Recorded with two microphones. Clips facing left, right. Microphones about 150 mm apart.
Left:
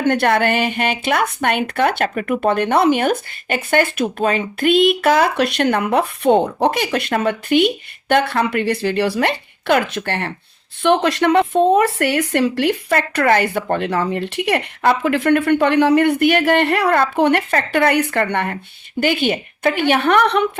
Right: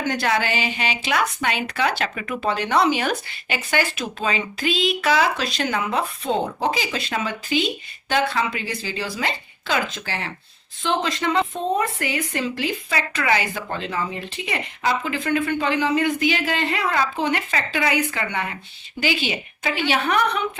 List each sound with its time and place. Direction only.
0.0 s speech: 60° left (ahead or behind)